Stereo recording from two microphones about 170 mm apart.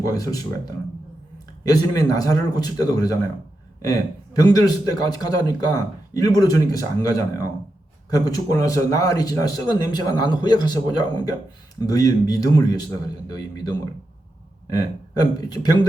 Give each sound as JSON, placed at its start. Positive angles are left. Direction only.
{"t": 0.0, "sound": "speech", "side_deg": 20}
{"t": 4.4, "sound": "speech", "side_deg": 20}